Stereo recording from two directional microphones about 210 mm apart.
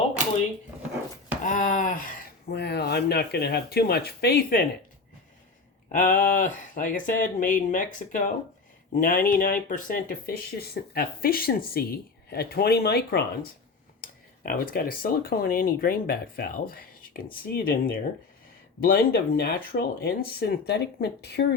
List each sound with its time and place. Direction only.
1.5 s a sound: 40° left (ahead or behind)
2.5 s speech: 50° left (ahead or behind)
5.9 s speech: 40° left (ahead or behind)